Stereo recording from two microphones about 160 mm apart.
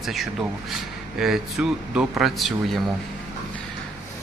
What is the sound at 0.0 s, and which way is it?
Speech, centre (ahead or behind).